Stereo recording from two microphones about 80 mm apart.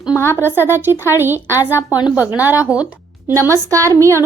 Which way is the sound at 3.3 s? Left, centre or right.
Right.